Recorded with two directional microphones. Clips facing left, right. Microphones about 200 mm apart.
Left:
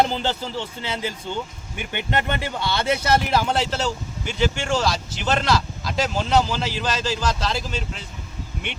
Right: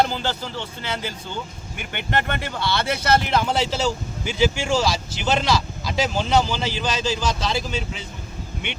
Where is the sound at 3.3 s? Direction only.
Centre (ahead or behind).